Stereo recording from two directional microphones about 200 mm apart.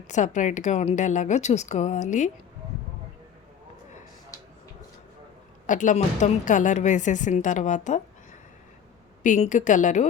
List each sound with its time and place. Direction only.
0.1 s a woman's voice: 35° left (ahead or behind)
5.6 s a woman's voice: 40° left (ahead or behind)
9.2 s a woman's voice: 40° left (ahead or behind)